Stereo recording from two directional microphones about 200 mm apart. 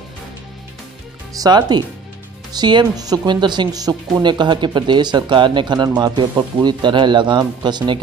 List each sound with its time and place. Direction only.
1.3 s speech: 20° right (ahead or behind)